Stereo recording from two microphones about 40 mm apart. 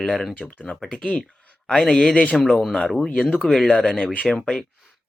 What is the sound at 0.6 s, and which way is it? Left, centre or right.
A man's voice, centre.